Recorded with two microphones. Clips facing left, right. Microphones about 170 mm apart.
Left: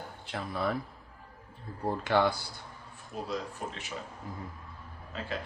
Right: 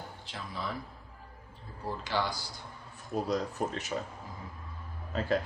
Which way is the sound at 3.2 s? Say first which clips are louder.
Right 3 dB; 40° right (ahead or behind).